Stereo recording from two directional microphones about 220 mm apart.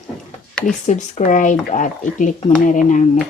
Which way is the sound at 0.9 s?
35° left (ahead or behind).